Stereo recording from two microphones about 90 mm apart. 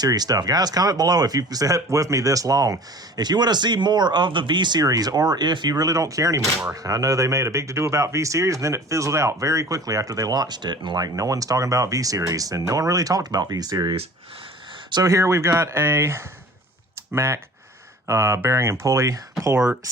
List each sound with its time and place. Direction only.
0.0 s speech: 45° right (ahead or behind)
15.0 s speech: 35° right (ahead or behind)